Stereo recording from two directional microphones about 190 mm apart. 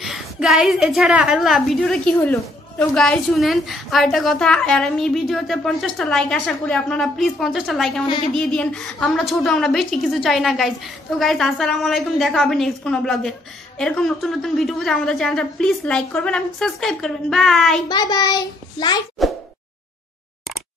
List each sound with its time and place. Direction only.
0.0 s a woman's voice: centre (ahead or behind)
17.8 s a child's voice: 20° left (ahead or behind)
19.2 s a sound: centre (ahead or behind)